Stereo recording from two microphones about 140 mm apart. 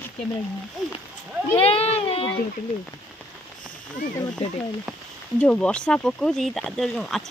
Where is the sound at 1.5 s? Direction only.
45° left (ahead or behind).